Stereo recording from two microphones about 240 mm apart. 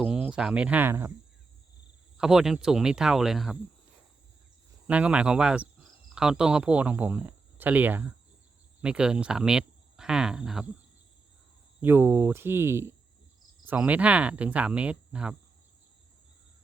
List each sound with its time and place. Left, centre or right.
0.0 s speech: centre
2.1 s speech: centre
4.9 s cricket: centre
8.8 s speech: centre
11.8 s speech: centre